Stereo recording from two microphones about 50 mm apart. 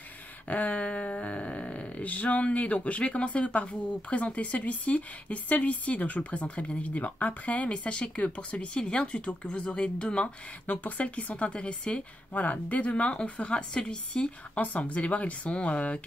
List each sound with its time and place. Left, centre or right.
0.5 s speech: left
10.7 s speech: left
12.4 s speech: left